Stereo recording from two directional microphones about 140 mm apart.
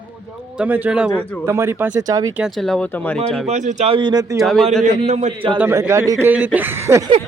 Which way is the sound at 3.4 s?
55° right (ahead or behind).